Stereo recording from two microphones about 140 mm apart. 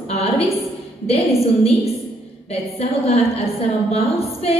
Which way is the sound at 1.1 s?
45° left (ahead or behind).